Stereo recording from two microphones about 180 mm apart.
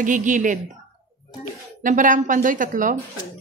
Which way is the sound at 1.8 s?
45° right (ahead or behind).